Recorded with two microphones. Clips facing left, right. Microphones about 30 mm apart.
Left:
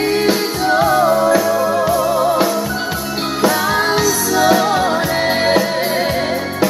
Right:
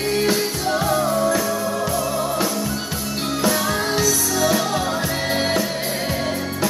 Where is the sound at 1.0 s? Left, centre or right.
Left.